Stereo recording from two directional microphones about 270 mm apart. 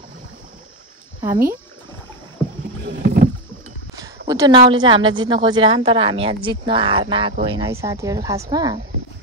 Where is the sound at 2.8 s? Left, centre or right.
Right.